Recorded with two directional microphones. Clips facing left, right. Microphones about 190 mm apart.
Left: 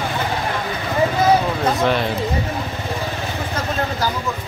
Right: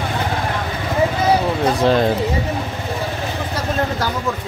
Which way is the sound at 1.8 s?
35° right (ahead or behind).